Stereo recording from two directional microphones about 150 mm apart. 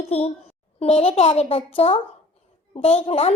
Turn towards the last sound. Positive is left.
turn(degrees=40)  # may be behind; listen again after turning